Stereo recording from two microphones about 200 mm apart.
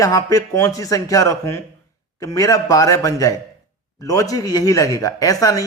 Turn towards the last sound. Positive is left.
turn(degrees=15)  # may be behind; listen again after turning